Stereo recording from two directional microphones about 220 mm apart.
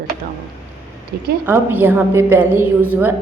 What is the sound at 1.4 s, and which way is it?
A woman's voice, 10° right (ahead or behind).